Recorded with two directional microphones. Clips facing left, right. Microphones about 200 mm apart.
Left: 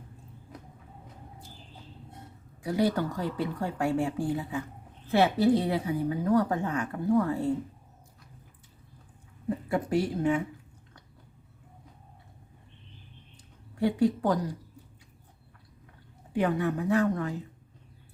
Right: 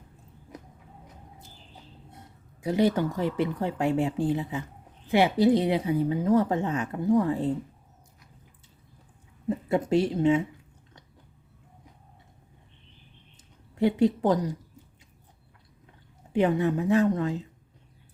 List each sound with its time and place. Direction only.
2.6 s a woman's voice: 20° right (ahead or behind)
9.6 s a woman's voice: 20° right (ahead or behind)
13.7 s a woman's voice: 20° right (ahead or behind)
16.3 s a woman's voice: 25° right (ahead or behind)